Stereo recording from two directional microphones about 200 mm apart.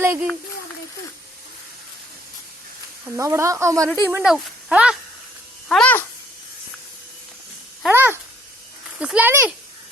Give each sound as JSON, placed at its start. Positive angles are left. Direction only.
{"t": 0.0, "sound": "speech", "side_deg": -10}
{"t": 3.2, "sound": "speech", "side_deg": -15}
{"t": 4.1, "sound": "speech", "side_deg": -5}
{"t": 7.9, "sound": "speech", "side_deg": -10}